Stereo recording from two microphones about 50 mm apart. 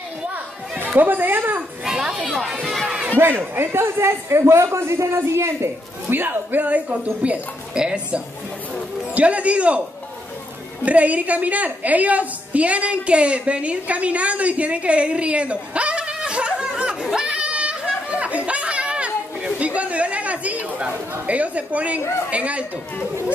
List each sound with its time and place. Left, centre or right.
0.9 s speech: right
1.9 s speech: centre
3.5 s a man's voice: right
6.0 s a man's voice: right
10.9 s a woman's voice: right
18.2 s chatter: right
22.3 s a man's voice: right